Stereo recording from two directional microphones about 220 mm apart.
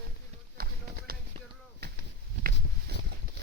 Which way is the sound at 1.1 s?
45° right (ahead or behind).